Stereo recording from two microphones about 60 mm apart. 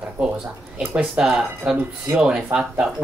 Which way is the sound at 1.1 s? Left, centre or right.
Centre.